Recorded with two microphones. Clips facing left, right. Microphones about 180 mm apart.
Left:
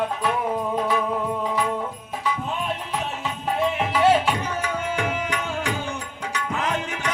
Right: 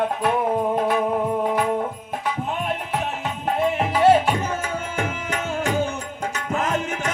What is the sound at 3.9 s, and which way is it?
Tabla, 45° right (ahead or behind).